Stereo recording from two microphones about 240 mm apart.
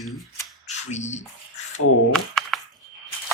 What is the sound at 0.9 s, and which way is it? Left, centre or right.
Speech, left.